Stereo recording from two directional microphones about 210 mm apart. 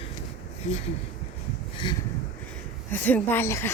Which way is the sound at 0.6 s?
35° left (ahead or behind).